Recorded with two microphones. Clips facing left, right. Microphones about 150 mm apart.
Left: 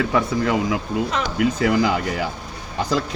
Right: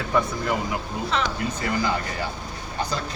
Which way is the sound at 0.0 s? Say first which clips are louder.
Left 4 dB; 85° left.